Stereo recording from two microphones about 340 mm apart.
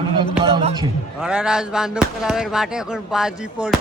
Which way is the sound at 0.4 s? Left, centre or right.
Centre.